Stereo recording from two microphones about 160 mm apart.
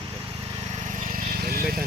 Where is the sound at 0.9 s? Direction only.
55° right (ahead or behind).